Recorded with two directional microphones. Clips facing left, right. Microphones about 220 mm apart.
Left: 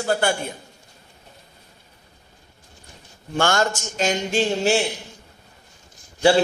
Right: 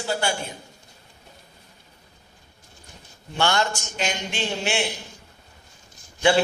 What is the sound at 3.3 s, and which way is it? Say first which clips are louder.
Speech: left 3 dB; 45° left (ahead or behind).